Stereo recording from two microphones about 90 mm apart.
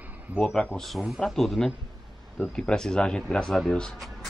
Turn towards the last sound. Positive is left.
turn(degrees=5)  # may be behind; listen again after turning